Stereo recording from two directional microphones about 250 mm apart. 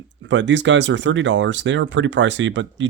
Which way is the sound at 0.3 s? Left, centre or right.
Right.